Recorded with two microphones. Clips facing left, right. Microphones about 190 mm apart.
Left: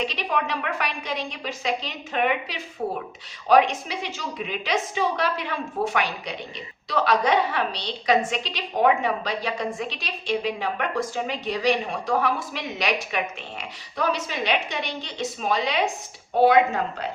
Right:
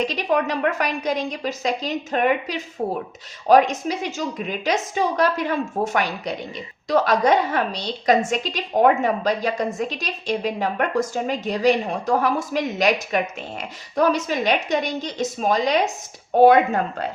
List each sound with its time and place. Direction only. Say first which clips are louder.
0.0 s a woman's voice: right 5 dB; 45° right (ahead or behind)